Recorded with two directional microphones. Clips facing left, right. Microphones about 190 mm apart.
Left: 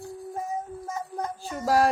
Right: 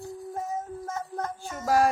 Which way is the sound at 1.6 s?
35° left (ahead or behind).